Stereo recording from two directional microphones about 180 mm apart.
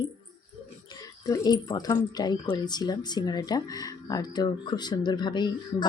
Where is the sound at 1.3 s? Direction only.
20° left (ahead or behind).